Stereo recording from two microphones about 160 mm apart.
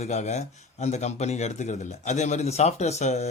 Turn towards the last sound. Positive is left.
turn(degrees=45)  # may be behind; listen again after turning